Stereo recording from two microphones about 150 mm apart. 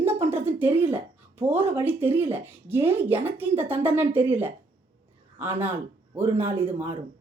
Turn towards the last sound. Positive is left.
turn(degrees=-15)  # may be behind; listen again after turning